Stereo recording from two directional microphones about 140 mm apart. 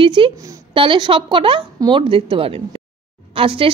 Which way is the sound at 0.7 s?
35° right (ahead or behind).